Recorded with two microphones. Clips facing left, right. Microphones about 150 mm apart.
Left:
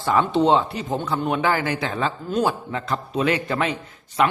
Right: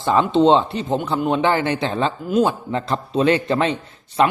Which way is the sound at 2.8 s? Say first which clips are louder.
Right 4 dB; 30° right (ahead or behind).